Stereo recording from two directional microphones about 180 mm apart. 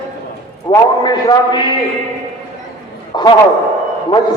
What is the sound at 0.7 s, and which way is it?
A man's voice, 25° left (ahead or behind).